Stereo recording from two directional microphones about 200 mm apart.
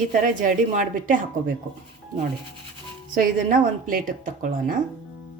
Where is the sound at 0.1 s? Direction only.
40° right (ahead or behind).